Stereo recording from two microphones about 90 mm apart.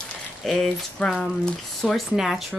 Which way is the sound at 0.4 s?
5° left (ahead or behind).